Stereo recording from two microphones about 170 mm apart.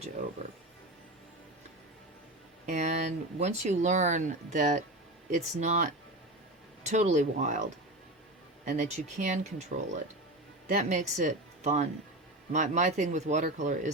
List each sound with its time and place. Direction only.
2.6 s speech: 45° right (ahead or behind)
8.6 s speech: 45° right (ahead or behind)